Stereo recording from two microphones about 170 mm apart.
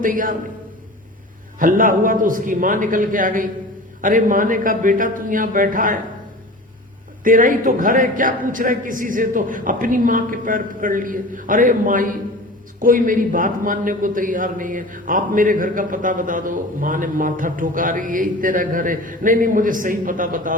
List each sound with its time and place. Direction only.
0.0 s a man's voice: 55° right (ahead or behind)
1.5 s a man's voice: 50° right (ahead or behind)
7.3 s a man's voice: 55° right (ahead or behind)